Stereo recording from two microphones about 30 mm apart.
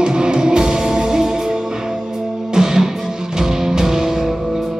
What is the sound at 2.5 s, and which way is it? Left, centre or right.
Music, right.